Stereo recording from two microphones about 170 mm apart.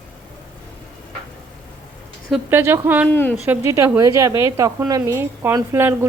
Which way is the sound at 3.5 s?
15° right (ahead or behind).